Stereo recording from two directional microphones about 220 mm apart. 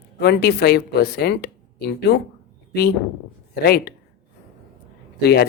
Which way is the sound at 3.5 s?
45° left (ahead or behind).